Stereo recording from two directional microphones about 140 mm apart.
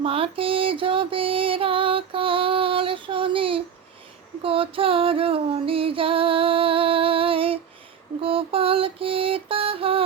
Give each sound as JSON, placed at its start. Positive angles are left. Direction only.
{"t": 0.0, "sound": "music", "side_deg": -40}
{"t": 8.2, "sound": "female singing", "side_deg": -40}